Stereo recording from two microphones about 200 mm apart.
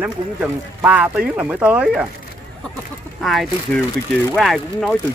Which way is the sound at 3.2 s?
Centre (ahead or behind).